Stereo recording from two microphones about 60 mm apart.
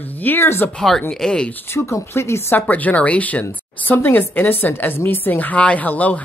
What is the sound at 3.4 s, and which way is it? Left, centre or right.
Speech, left.